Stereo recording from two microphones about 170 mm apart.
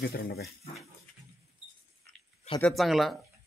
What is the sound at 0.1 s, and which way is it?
Speech, 70° left (ahead or behind).